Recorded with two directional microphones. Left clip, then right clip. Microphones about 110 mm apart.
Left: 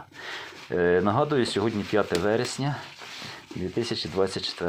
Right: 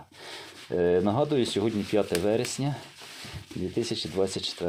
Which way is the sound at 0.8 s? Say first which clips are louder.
Left 2 dB; 20° right (ahead or behind).